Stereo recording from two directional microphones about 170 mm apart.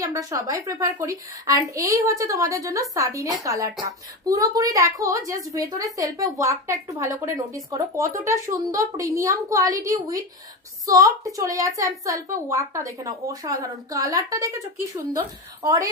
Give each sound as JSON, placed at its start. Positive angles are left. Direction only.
{"t": 0.0, "sound": "a woman's voice", "side_deg": -20}